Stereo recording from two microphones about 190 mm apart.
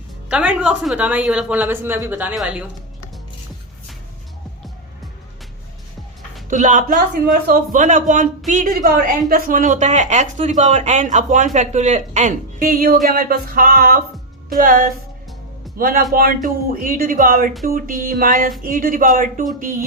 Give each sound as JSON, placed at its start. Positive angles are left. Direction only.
{"t": 0.3, "sound": "a woman's voice", "side_deg": -5}
{"t": 6.5, "sound": "a woman's voice", "side_deg": -40}